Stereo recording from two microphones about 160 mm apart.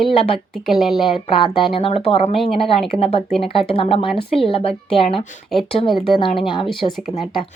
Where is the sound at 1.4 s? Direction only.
30° left (ahead or behind).